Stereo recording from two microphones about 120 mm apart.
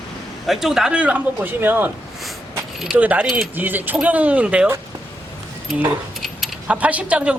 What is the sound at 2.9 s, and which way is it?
Speech, 15° right (ahead or behind).